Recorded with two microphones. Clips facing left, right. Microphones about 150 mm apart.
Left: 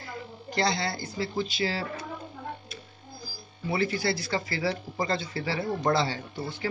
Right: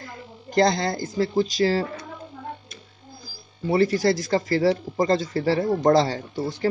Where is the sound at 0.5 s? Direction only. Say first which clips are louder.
Right 8 dB; 45° right (ahead or behind).